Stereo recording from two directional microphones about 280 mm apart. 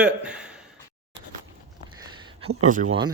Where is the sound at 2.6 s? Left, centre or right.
Right.